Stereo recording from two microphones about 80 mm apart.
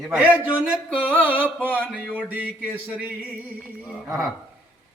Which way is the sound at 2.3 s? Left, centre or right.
Centre.